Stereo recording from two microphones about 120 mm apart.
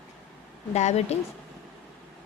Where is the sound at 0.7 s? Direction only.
65° left (ahead or behind).